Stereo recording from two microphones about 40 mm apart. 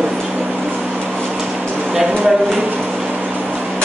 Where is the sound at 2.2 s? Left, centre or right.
Right.